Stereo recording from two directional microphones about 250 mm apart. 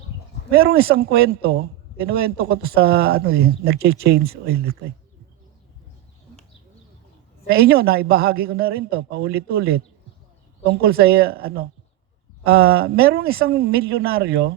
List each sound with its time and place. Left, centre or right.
0.5 s a man's voice: right
7.5 s a man's voice: right